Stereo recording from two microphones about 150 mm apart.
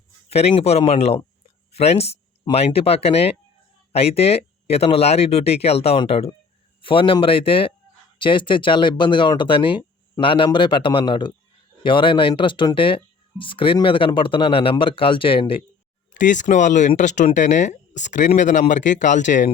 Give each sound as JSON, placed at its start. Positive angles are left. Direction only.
{"t": 0.3, "sound": "speech", "side_deg": 45}
{"t": 16.1, "sound": "speech", "side_deg": 55}